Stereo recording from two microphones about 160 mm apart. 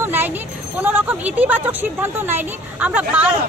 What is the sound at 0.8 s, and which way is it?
Speech, 10° right (ahead or behind).